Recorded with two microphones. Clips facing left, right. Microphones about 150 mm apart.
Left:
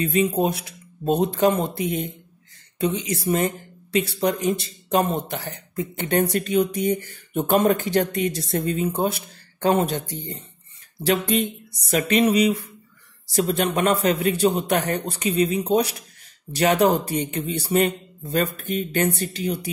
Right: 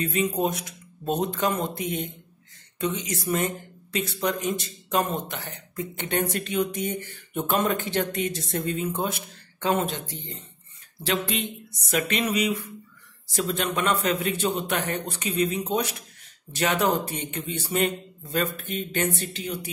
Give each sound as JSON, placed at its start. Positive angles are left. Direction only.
{"t": 0.0, "sound": "speech", "side_deg": 30}